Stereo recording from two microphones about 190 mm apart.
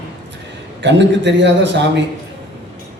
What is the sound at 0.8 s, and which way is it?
A man's voice, 70° right (ahead or behind).